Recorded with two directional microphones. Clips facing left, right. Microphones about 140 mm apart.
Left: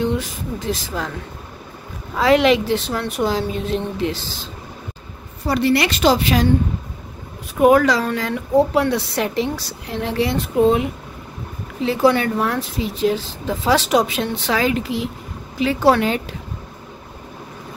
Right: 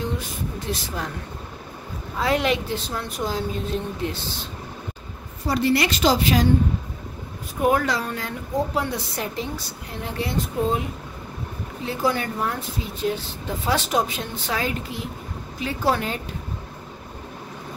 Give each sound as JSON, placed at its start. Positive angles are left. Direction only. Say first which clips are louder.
{"t": 0.0, "sound": "speech", "louder": "left 7 dB", "side_deg": 80}
{"t": 2.1, "sound": "a woman's voice", "louder": "left 8 dB", "side_deg": 90}
{"t": 5.5, "sound": "speech", "louder": "left 3 dB", "side_deg": 70}
{"t": 7.5, "sound": "a woman's voice", "louder": "left 8 dB", "side_deg": 90}